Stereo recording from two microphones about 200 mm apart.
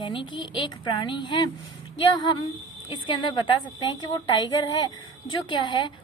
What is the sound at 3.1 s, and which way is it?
A woman's voice, 25° left (ahead or behind).